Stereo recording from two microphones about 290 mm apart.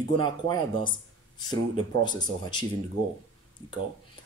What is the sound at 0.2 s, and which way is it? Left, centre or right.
Speech, centre.